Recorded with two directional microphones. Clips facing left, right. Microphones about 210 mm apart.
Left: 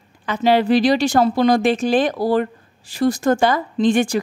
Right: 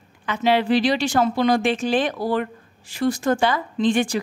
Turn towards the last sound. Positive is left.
turn(degrees=45)  # may be behind; listen again after turning